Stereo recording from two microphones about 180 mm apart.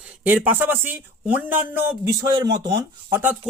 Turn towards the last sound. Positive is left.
turn(degrees=-10)  # may be behind; listen again after turning